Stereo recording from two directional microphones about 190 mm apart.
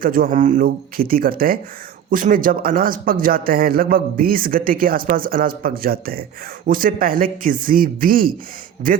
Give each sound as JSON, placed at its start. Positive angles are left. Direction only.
{"t": 0.0, "sound": "speech", "side_deg": -50}